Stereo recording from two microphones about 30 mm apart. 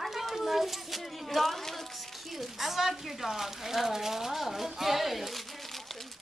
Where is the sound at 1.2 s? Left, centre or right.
Centre.